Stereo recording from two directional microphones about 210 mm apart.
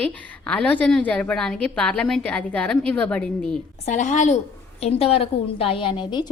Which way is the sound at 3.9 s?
35° left (ahead or behind).